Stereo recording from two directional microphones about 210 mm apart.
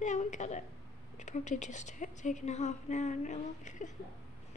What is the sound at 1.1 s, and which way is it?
A woman's voice, 35° left (ahead or behind).